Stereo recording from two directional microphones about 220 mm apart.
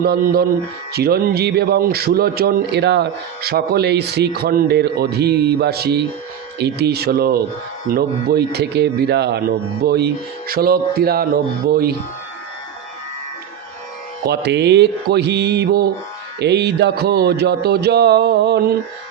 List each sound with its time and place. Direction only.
0.0 s a man's voice: 45° right (ahead or behind)
14.3 s a man's voice: 50° right (ahead or behind)